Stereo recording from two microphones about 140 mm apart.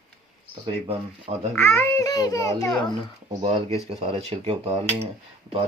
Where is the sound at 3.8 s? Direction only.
45° right (ahead or behind).